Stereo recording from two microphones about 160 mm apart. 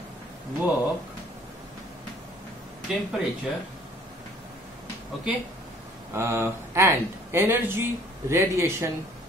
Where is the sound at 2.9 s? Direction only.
5° right (ahead or behind).